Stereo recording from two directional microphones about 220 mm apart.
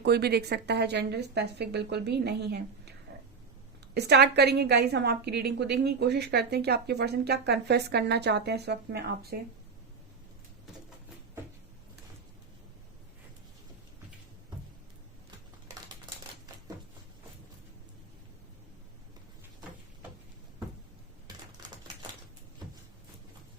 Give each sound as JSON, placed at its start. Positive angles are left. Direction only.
{"t": 0.0, "sound": "a woman's voice", "side_deg": -45}
{"t": 3.9, "sound": "a woman's voice", "side_deg": -50}